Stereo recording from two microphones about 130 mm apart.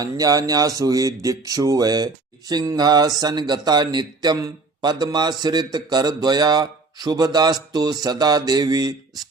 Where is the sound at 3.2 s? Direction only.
30° right (ahead or behind).